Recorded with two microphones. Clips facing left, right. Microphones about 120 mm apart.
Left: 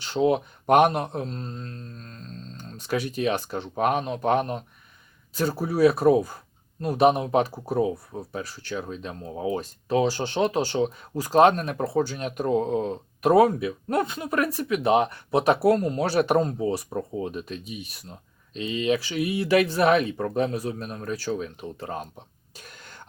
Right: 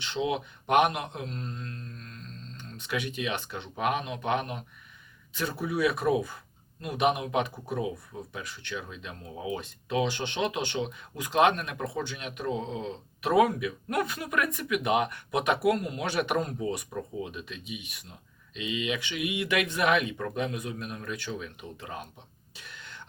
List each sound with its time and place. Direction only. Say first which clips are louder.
0.0 s speech: left 8 dB; 40° left (ahead or behind)
22.5 s throat clearing: left 1 dB; 40° left (ahead or behind)